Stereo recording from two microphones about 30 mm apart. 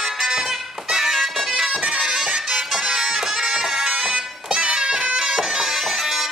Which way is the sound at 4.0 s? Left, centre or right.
Right.